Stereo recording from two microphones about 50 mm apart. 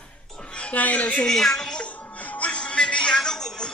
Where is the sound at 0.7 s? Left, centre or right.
Left.